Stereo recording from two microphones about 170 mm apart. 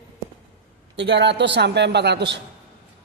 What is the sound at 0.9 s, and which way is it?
Speech, 90° right.